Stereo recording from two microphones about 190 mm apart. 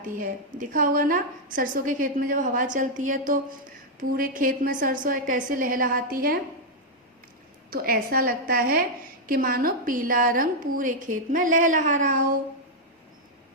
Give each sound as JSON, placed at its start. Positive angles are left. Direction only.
{"t": 0.2, "sound": "a woman's voice", "side_deg": -45}
{"t": 7.7, "sound": "a woman's voice", "side_deg": -50}